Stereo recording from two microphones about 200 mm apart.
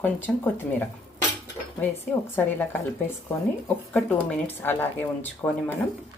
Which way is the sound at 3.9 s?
5° left (ahead or behind).